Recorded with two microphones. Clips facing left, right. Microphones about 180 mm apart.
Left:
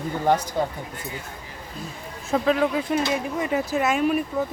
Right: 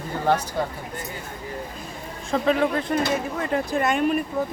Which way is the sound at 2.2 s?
5° left (ahead or behind).